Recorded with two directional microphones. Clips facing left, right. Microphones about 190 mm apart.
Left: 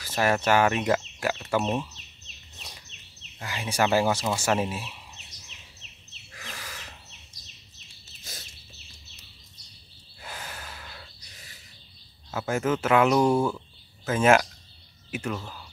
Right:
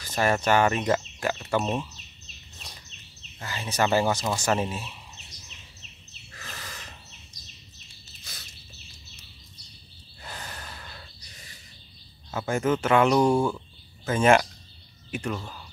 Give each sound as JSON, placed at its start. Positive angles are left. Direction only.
{"t": 0.0, "sound": "speech", "side_deg": 5}
{"t": 3.3, "sound": "speech", "side_deg": 10}
{"t": 6.3, "sound": "a sound", "side_deg": 10}
{"t": 8.2, "sound": "bird", "side_deg": 45}
{"t": 10.2, "sound": "gasp", "side_deg": 5}
{"t": 12.3, "sound": "speech", "side_deg": 5}